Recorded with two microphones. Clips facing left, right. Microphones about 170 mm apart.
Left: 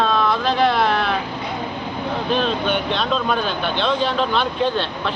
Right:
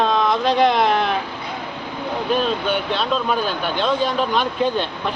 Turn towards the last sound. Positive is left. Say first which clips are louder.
# even
turn(degrees=-10)  # may be behind; listen again after turning